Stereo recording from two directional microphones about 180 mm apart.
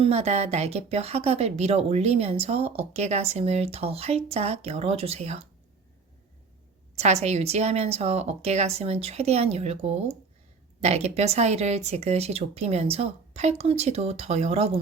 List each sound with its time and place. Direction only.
0.0 s speech: 35° right (ahead or behind)
6.9 s speech: 35° right (ahead or behind)